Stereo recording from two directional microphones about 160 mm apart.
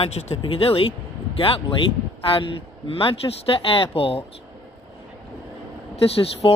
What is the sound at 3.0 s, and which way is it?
Speech, 35° left (ahead or behind).